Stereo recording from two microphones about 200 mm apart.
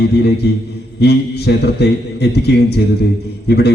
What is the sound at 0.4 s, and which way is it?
A man's voice, 55° left (ahead or behind).